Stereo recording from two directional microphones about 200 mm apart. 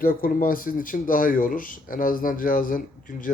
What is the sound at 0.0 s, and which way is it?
Speech, 45° left (ahead or behind).